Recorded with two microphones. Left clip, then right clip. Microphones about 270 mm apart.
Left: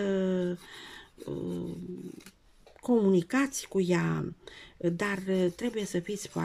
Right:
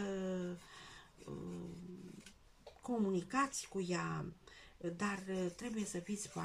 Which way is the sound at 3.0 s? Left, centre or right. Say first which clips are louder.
Left 10 dB; left.